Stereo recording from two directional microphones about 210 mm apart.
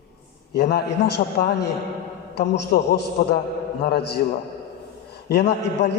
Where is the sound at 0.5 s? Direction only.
55° left (ahead or behind).